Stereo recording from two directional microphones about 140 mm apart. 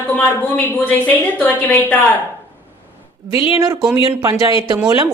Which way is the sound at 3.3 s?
40° left (ahead or behind).